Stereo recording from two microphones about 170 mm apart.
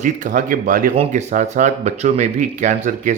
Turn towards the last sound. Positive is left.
turn(degrees=-45)  # may be behind; listen again after turning